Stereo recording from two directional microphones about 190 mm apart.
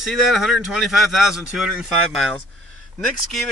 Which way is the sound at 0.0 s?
Centre (ahead or behind).